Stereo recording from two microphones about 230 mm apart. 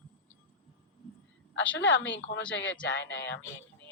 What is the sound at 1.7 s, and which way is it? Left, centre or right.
A woman's voice, left.